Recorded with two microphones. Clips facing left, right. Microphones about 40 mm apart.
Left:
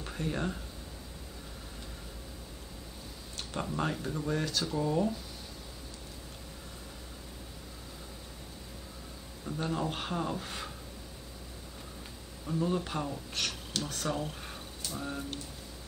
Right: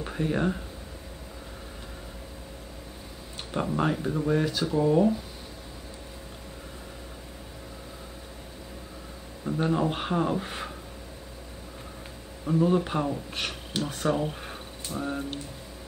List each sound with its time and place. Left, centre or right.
0.0 s speech: centre
3.5 s speech: centre
9.4 s speech: right
12.4 s speech: right